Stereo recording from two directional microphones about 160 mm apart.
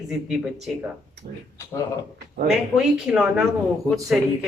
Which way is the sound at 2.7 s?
5° right (ahead or behind).